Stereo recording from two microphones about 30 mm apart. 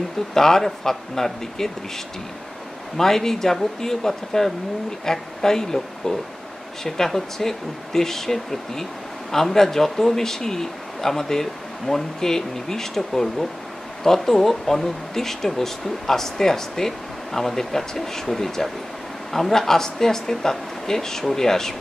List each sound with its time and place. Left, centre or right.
0.3 s speech: centre
3.0 s speech: centre